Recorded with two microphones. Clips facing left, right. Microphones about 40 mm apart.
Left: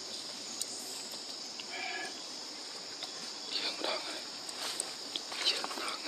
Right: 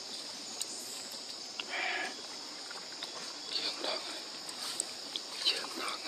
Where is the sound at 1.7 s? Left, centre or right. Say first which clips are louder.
Right 4 dB; right.